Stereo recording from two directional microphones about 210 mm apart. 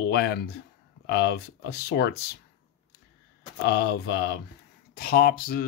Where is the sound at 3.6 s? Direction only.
50° left (ahead or behind).